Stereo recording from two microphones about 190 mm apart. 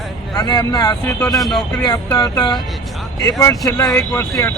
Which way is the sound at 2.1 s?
20° left (ahead or behind).